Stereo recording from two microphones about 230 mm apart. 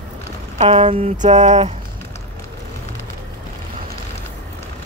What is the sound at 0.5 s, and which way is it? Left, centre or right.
Speech, right.